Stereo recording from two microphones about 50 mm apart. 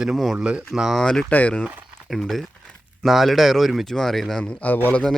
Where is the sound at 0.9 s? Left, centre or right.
Centre.